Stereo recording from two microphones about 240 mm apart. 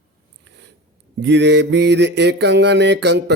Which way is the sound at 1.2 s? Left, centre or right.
Right.